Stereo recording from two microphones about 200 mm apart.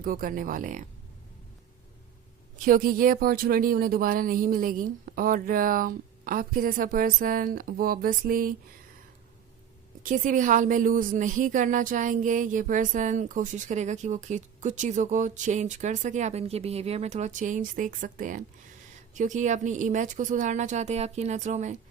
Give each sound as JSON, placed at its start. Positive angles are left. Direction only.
{"t": 0.0, "sound": "speech", "side_deg": -45}
{"t": 2.6, "sound": "speech", "side_deg": -45}
{"t": 10.0, "sound": "a woman's voice", "side_deg": -40}